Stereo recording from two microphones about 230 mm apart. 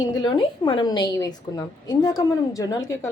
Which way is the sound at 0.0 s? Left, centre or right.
Centre.